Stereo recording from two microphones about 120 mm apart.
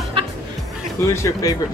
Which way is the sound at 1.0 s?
20° left (ahead or behind).